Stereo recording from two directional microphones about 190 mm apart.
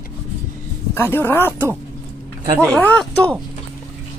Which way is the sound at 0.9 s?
10° left (ahead or behind).